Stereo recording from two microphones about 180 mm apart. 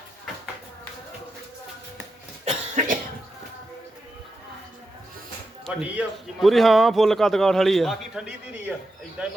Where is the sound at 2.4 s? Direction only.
40° right (ahead or behind).